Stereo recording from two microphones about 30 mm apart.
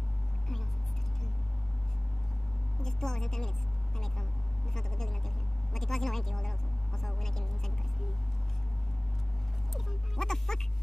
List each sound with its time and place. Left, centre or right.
2.8 s a woman's voice: centre
4.7 s speech: centre
10.1 s speech: centre